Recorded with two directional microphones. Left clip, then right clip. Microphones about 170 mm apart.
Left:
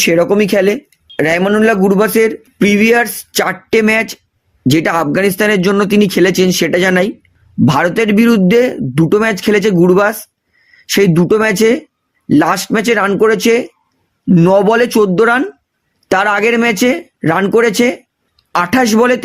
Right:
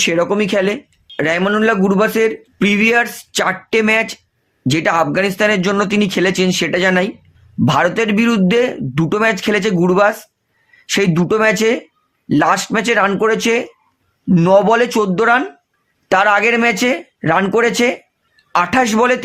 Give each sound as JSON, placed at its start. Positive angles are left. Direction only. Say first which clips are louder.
{"t": 0.0, "sound": "speech", "louder": "left 4 dB", "side_deg": 40}
{"t": 7.6, "sound": "speech", "louder": "left 2 dB", "side_deg": 30}